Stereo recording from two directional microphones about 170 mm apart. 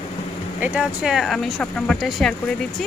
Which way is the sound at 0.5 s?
10° right (ahead or behind).